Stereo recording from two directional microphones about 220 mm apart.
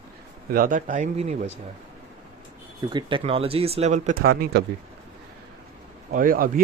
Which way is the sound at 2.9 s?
25° right (ahead or behind).